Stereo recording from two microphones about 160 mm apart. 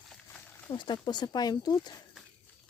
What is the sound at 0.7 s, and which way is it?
Speech, 30° left (ahead or behind).